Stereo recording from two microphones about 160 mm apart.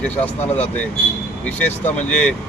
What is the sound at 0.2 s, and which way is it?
Speech, 10° left (ahead or behind).